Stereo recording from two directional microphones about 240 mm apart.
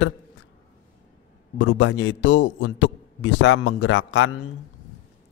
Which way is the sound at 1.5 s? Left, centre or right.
Left.